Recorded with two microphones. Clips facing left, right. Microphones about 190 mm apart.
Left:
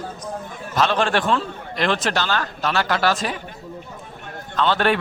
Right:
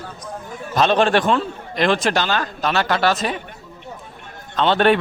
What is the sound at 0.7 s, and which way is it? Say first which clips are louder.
A man's voice: right 4 dB; 20° right (ahead or behind).